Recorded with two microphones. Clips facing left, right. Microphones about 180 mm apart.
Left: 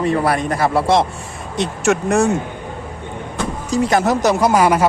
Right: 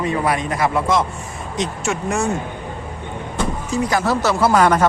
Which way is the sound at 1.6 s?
65° left (ahead or behind).